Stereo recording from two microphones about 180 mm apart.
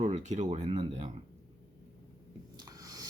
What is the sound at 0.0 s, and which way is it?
Speech, 40° right (ahead or behind).